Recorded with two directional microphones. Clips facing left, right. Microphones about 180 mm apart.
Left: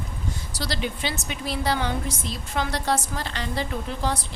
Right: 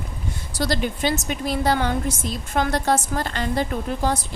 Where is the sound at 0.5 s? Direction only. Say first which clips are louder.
Right 7 dB; 50° right (ahead or behind).